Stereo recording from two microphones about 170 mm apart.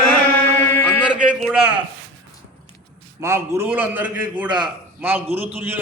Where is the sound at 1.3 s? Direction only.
5° right (ahead or behind).